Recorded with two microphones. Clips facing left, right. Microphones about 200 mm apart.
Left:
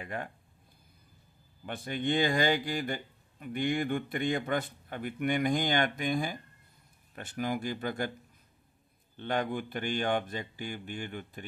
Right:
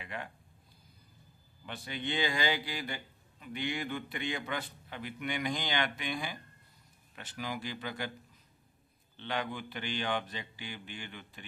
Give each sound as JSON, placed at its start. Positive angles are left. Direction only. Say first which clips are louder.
{"t": 0.0, "sound": "speech", "louder": "left 5 dB", "side_deg": 45}
{"t": 1.7, "sound": "speech", "louder": "left 7 dB", "side_deg": 50}
{"t": 9.1, "sound": "speech", "louder": "left 5 dB", "side_deg": 45}